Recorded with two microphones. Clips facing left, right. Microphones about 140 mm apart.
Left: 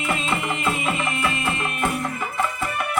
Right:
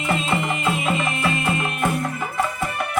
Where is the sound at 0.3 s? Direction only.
Centre (ahead or behind).